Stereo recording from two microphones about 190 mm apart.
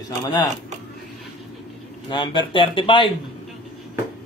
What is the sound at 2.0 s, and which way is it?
A woman's voice, 25° left (ahead or behind).